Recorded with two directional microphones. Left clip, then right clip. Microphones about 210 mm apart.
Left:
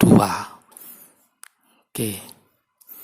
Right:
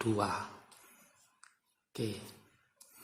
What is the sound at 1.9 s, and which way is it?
Speech, 35° left (ahead or behind).